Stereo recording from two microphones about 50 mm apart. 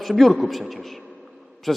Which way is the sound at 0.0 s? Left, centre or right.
Centre.